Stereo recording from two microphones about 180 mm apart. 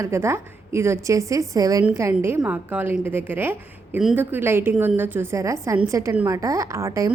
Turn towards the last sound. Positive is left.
turn(degrees=-15)  # may be behind; listen again after turning